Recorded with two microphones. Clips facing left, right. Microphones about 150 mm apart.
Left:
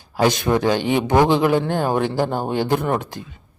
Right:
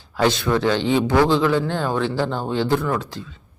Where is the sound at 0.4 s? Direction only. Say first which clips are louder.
Left 1 dB; 15° left (ahead or behind).